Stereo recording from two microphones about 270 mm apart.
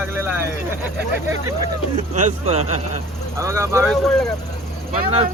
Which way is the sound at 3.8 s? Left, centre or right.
Centre.